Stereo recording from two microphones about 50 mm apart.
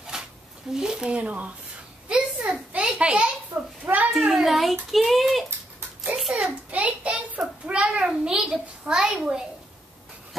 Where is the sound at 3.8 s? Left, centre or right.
Right.